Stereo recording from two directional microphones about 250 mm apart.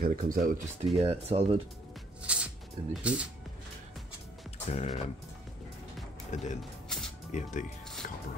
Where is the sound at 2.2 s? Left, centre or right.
Centre.